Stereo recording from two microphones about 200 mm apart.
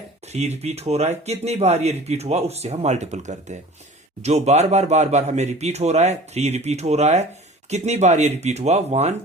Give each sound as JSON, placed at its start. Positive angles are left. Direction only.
{"t": 0.3, "sound": "speech", "side_deg": -35}